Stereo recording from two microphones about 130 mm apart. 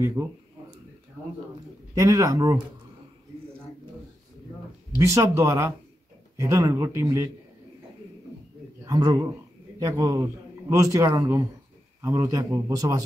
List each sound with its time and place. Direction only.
0.0 s a man's voice: 25° right (ahead or behind)
2.0 s a man's voice: 25° right (ahead or behind)
5.0 s a man's voice: 25° right (ahead or behind)
8.8 s a man's voice: 30° right (ahead or behind)